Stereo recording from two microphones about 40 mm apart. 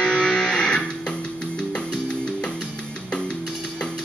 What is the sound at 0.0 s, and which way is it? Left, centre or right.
Music, left.